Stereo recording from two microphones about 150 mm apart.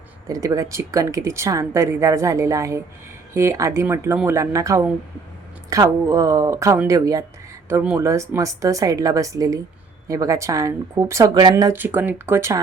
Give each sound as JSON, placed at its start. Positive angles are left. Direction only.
{"t": 0.3, "sound": "speech", "side_deg": -20}